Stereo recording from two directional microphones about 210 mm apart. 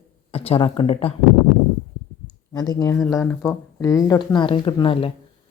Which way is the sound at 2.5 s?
20° left (ahead or behind).